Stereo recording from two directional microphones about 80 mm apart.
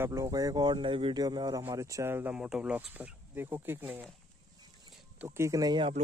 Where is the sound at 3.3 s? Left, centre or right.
Right.